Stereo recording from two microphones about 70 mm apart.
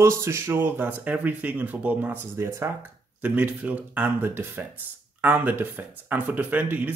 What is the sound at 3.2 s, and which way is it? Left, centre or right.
Speech, right.